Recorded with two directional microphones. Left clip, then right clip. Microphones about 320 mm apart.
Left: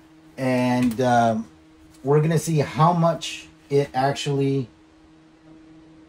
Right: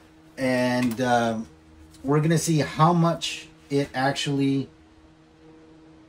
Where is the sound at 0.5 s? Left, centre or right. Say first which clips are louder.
Left 3 dB; centre.